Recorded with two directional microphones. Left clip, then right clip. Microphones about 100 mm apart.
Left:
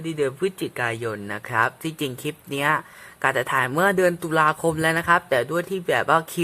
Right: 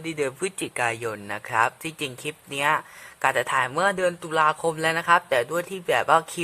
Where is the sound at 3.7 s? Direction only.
15° left (ahead or behind).